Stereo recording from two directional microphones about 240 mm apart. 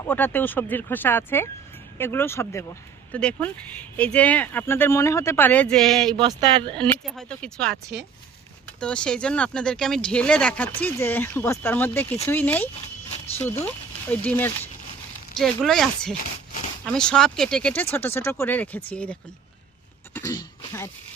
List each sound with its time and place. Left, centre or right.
0.0 s speech: centre
6.1 s speech: centre
6.7 s speech: centre
20.1 s speech: centre